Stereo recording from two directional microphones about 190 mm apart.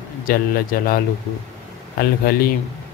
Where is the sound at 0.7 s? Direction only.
50° left (ahead or behind).